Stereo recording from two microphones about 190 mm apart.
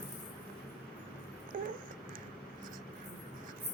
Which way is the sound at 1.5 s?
45° right (ahead or behind).